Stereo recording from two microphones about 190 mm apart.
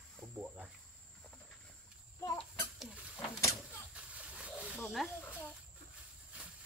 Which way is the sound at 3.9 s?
5° right (ahead or behind).